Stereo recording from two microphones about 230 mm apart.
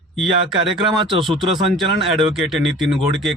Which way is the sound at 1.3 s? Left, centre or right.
Centre.